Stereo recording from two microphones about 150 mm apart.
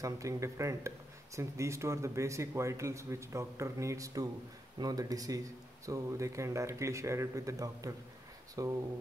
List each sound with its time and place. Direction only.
0.0 s speech: 20° right (ahead or behind)